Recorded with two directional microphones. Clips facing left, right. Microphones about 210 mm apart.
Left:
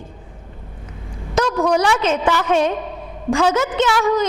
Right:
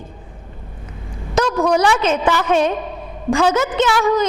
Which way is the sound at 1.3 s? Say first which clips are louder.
Right 1 dB; 10° right (ahead or behind).